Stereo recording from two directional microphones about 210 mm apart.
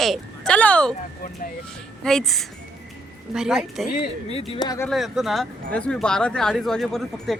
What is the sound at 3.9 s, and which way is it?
Speech, 25° left (ahead or behind).